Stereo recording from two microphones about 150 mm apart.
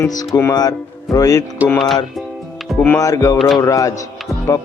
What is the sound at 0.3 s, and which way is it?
Speech, 20° left (ahead or behind).